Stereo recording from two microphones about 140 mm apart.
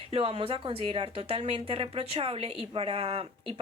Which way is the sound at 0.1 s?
45° right (ahead or behind).